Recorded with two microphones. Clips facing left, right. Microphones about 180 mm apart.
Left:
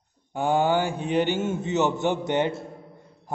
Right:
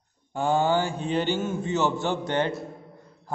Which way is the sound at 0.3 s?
15° left (ahead or behind).